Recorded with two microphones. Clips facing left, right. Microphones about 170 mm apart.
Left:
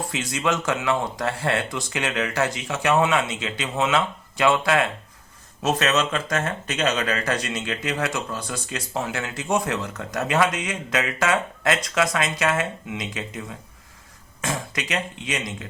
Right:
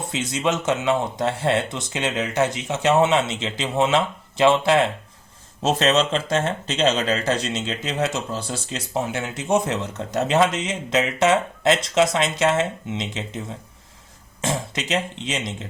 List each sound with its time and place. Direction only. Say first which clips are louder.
0.1 s speech: right 3 dB; 20° right (ahead or behind)